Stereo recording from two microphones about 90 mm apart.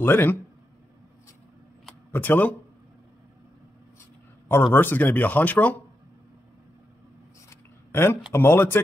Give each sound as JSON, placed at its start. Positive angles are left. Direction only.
{"t": 0.0, "sound": "speech", "side_deg": 20}
{"t": 2.1, "sound": "speech", "side_deg": 20}
{"t": 4.7, "sound": "speech", "side_deg": 20}
{"t": 7.4, "sound": "a sound", "side_deg": 25}
{"t": 8.3, "sound": "speech", "side_deg": 25}